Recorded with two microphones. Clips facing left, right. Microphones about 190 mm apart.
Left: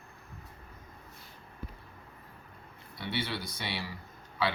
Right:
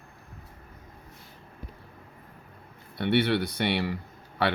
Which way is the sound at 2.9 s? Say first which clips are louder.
Right 12 dB; 60° right (ahead or behind).